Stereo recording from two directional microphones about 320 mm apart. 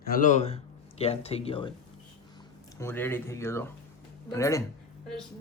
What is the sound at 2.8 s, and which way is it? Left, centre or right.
Speech, centre.